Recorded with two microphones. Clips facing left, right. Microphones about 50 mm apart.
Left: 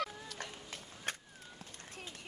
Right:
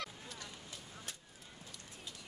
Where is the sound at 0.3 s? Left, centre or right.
Left.